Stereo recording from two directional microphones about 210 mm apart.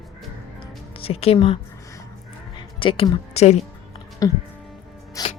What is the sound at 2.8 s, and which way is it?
Speech, 25° left (ahead or behind).